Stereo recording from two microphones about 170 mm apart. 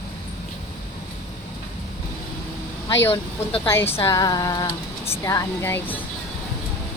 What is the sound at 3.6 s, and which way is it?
Speech, 15° left (ahead or behind).